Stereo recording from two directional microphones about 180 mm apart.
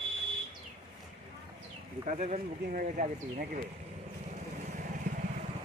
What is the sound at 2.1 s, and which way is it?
Speech, 40° right (ahead or behind).